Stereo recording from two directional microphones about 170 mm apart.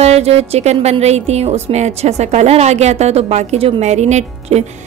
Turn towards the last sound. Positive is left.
turn(degrees=-40)  # may be behind; listen again after turning